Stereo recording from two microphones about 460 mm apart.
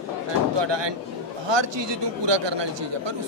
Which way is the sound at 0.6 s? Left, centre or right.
Right.